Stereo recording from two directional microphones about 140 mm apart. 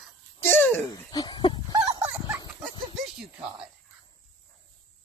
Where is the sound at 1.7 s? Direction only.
25° right (ahead or behind).